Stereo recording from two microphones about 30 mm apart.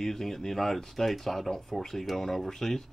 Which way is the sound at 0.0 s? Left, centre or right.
Centre.